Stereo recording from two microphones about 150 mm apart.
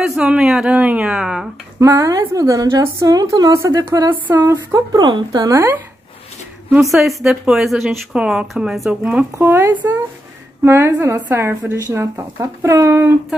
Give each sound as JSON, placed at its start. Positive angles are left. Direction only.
{"t": 0.0, "sound": "speech", "side_deg": -5}
{"t": 1.8, "sound": "a woman's voice", "side_deg": -20}
{"t": 6.8, "sound": "speech", "side_deg": 0}